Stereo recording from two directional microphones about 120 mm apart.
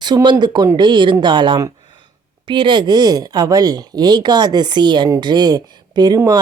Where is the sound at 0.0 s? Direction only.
35° right (ahead or behind).